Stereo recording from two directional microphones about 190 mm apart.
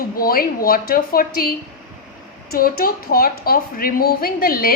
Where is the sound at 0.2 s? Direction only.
50° left (ahead or behind).